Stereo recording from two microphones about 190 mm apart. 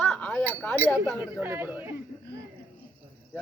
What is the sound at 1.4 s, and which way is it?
Speech, 10° right (ahead or behind).